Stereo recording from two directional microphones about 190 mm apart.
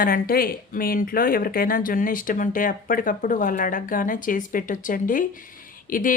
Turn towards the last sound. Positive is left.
turn(degrees=45)  # may be behind; listen again after turning